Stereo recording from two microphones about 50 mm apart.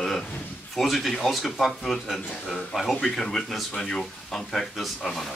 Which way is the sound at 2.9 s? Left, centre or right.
Centre.